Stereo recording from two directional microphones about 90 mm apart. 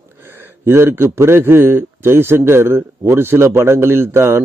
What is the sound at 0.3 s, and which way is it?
A man's voice, 30° right (ahead or behind).